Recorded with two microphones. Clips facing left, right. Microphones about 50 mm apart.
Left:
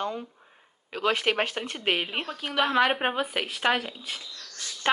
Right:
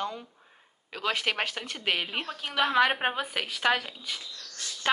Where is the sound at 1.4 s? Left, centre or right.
Left.